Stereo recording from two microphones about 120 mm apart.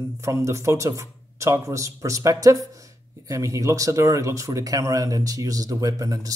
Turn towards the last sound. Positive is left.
turn(degrees=-30)  # may be behind; listen again after turning